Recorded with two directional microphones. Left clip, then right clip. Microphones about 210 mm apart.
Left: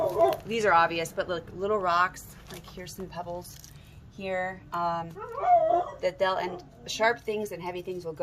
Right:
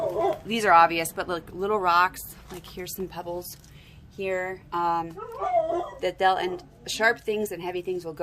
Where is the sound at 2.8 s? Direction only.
50° right (ahead or behind).